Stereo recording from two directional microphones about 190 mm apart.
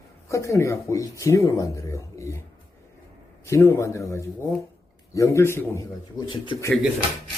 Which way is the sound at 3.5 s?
15° left (ahead or behind).